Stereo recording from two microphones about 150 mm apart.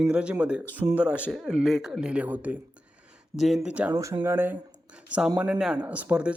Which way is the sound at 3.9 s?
20° right (ahead or behind).